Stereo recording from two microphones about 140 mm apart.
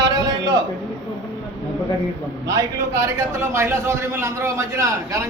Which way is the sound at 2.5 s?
20° right (ahead or behind).